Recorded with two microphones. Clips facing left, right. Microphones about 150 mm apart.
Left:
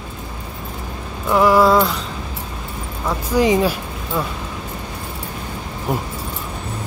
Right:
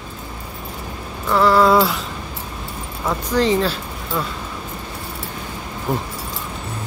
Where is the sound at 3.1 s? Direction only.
10° left (ahead or behind).